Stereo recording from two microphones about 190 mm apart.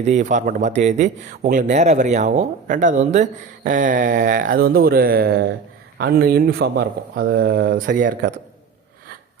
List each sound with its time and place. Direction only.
0.0 s speech: 40° right (ahead or behind)